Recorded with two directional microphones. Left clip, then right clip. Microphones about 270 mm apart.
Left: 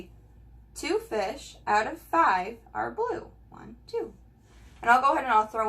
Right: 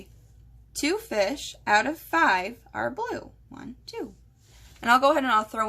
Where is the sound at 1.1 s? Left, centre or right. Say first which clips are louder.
Right 4 dB; right.